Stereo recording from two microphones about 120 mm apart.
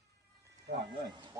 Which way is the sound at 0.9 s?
40° right (ahead or behind).